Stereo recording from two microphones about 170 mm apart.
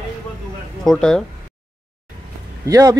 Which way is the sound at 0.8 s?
5° left (ahead or behind).